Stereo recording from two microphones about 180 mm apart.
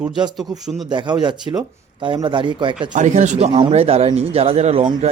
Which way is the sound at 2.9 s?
45° right (ahead or behind).